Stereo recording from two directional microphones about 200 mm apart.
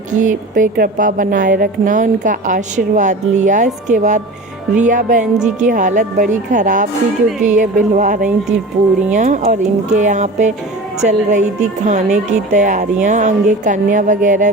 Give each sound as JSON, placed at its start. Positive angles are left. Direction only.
{"t": 0.2, "sound": "a woman's voice", "side_deg": -40}